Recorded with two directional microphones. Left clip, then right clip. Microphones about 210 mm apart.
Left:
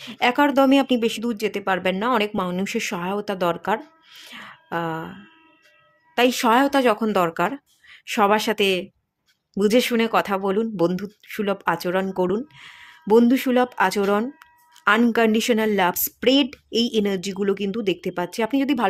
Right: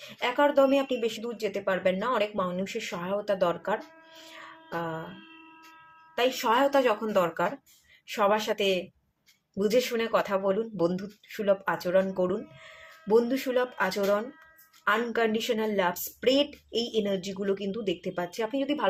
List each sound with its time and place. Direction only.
0.0 s speech: 50° left (ahead or behind)
6.1 s speech: 50° left (ahead or behind)